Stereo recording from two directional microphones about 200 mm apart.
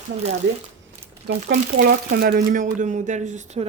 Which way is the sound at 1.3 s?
55° right (ahead or behind).